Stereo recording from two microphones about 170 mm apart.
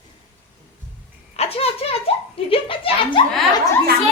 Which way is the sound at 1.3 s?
35° left (ahead or behind).